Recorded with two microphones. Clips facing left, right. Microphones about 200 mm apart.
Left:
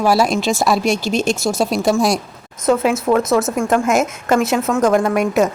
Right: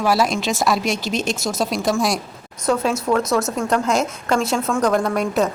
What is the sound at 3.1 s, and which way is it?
Speech, 35° left (ahead or behind).